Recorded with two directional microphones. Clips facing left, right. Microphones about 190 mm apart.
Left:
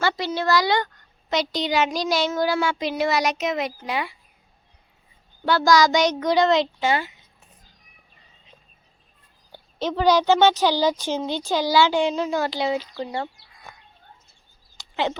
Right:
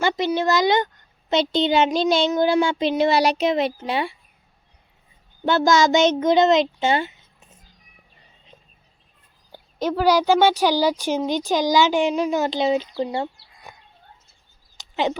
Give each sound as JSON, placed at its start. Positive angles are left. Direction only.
{"t": 0.0, "sound": "a child's voice", "side_deg": -15}
{"t": 5.5, "sound": "a child's voice", "side_deg": -25}
{"t": 9.5, "sound": "speech", "side_deg": -10}
{"t": 13.0, "sound": "chicken", "side_deg": -20}
{"t": 14.8, "sound": "a sound", "side_deg": -15}